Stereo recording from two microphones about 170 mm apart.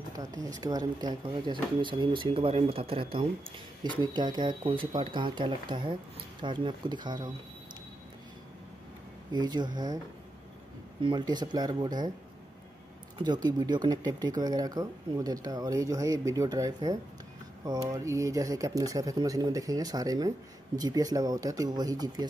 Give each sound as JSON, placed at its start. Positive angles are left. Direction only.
{"t": 0.2, "sound": "speech", "side_deg": -20}
{"t": 9.3, "sound": "speech", "side_deg": -25}
{"t": 11.0, "sound": "speech", "side_deg": -25}
{"t": 13.2, "sound": "speech", "side_deg": -25}